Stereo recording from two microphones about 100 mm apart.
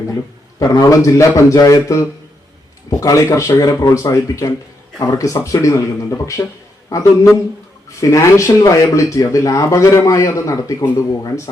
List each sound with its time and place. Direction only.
0.6 s speech: 35° left (ahead or behind)